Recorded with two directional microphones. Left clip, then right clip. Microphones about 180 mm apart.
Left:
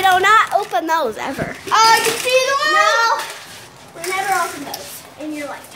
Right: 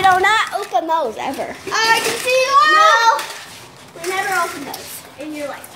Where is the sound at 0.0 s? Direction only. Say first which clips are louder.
Left 1 dB; 15° left (ahead or behind).